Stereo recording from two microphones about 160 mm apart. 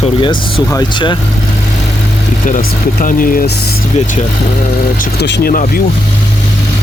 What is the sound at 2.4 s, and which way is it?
Speech, 55° left (ahead or behind).